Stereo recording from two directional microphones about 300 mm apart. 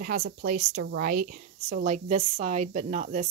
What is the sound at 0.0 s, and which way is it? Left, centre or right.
A woman's voice, right.